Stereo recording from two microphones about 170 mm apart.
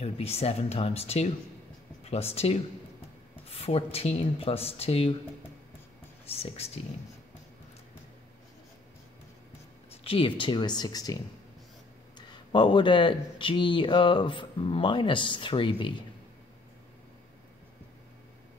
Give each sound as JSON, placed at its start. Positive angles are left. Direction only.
{"t": 0.0, "sound": "speech", "side_deg": 35}
{"t": 6.2, "sound": "speech", "side_deg": 35}
{"t": 10.0, "sound": "speech", "side_deg": 30}
{"t": 12.2, "sound": "speech", "side_deg": 25}